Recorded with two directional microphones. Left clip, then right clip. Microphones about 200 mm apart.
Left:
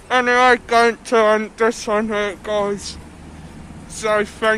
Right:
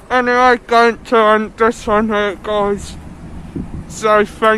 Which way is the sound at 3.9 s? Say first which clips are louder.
Right 6 dB; 10° right (ahead or behind).